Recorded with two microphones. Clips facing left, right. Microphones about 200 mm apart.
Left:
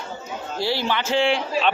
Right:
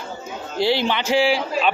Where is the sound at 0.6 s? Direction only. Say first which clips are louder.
Right 4 dB; 20° right (ahead or behind).